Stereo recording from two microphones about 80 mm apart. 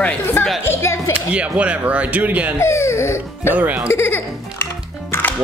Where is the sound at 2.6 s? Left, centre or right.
Left.